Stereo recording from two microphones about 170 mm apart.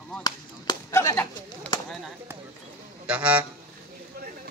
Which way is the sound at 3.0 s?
5° right (ahead or behind).